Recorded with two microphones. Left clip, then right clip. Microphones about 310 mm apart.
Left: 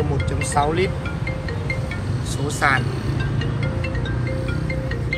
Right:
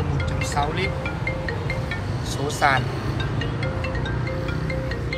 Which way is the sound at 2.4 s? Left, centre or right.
Centre.